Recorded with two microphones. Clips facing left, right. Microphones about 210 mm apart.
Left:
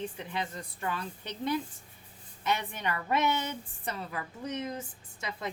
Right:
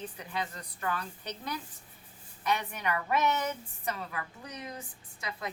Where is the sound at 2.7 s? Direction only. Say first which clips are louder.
Even; 30° left (ahead or behind).